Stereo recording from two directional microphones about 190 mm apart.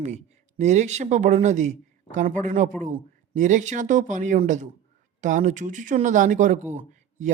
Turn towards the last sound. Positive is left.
turn(degrees=-40)  # may be behind; listen again after turning